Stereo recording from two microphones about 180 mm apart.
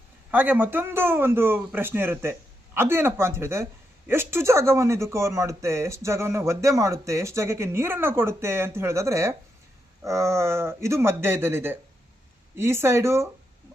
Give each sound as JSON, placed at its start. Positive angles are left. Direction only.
{"t": 0.3, "sound": "speech", "side_deg": -10}